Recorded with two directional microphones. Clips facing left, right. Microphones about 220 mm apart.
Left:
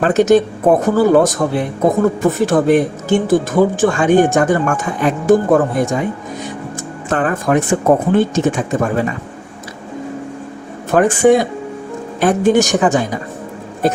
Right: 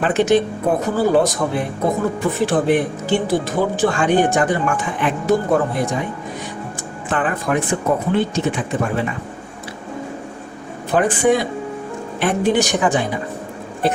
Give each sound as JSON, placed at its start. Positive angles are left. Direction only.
{"t": 0.0, "sound": "speech", "side_deg": 45}
{"t": 7.1, "sound": "speech", "side_deg": 45}
{"t": 10.9, "sound": "speech", "side_deg": 45}